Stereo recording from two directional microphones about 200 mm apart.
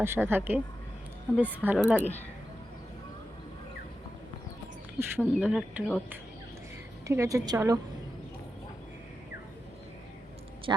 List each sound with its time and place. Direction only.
0.0 s a woman's voice: 10° right (ahead or behind)
4.9 s a woman's voice: 10° right (ahead or behind)
7.1 s a woman's voice: 15° right (ahead or behind)
10.7 s speech: 20° right (ahead or behind)